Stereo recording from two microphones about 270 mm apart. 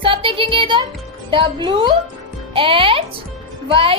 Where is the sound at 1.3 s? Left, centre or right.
Centre.